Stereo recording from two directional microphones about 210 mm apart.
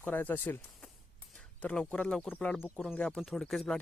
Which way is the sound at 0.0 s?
10° left (ahead or behind).